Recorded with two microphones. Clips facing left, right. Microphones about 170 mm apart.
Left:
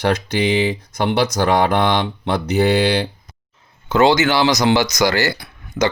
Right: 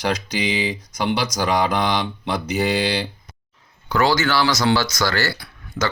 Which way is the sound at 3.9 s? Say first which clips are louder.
Left 5 dB; 20° left (ahead or behind).